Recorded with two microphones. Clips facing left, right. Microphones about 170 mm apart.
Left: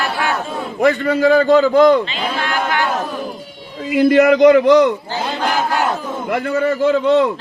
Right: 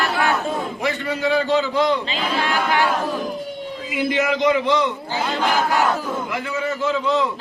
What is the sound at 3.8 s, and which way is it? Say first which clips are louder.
A man's voice: left 10 dB; 60° left (ahead or behind).